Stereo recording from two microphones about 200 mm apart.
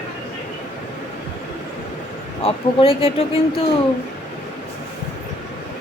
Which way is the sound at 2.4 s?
30° left (ahead or behind).